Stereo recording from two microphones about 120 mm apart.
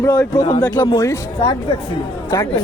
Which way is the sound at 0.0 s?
30° left (ahead or behind).